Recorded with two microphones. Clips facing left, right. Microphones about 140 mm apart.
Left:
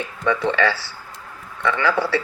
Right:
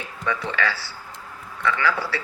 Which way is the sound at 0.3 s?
25° left (ahead or behind).